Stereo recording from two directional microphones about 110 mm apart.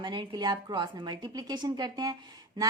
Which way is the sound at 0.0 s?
45° right (ahead or behind).